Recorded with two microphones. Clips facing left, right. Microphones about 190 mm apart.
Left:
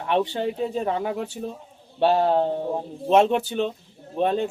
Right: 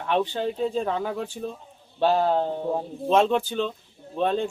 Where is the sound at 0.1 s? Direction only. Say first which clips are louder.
Left 1 dB; 15° left (ahead or behind).